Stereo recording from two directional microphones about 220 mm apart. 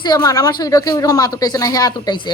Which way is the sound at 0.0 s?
20° left (ahead or behind).